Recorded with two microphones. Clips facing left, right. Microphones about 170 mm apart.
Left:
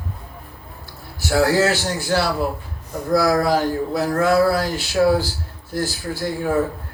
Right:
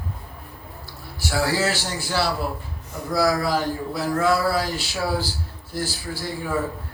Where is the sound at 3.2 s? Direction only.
50° left (ahead or behind).